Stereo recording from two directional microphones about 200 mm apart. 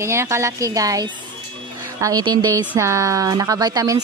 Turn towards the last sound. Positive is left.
turn(degrees=-15)  # may be behind; listen again after turning